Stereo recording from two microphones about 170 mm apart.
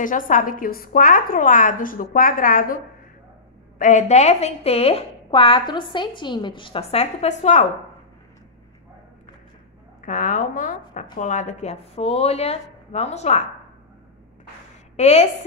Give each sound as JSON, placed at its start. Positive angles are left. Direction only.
{"t": 0.0, "sound": "a woman's voice", "side_deg": 50}
{"t": 10.0, "sound": "a woman's voice", "side_deg": 50}
{"t": 15.0, "sound": "a woman's voice", "side_deg": 40}